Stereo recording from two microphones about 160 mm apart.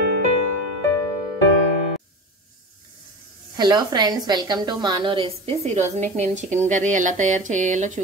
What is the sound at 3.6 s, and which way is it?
A woman's voice, 25° right (ahead or behind).